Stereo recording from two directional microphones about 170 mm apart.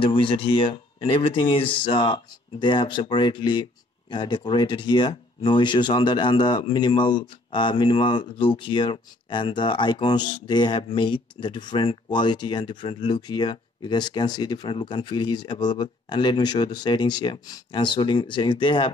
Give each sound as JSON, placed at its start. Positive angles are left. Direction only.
{"t": 0.0, "sound": "speech", "side_deg": 30}